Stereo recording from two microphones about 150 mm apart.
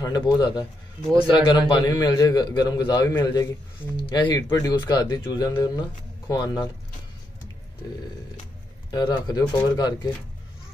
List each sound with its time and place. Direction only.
0.0 s a man's voice: 25° left (ahead or behind)
8.9 s a man's voice: 30° left (ahead or behind)